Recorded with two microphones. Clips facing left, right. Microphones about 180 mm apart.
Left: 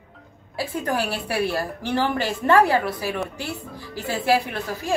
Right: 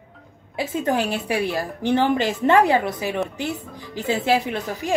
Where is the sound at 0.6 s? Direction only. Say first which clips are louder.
Right 3 dB; 20° right (ahead or behind).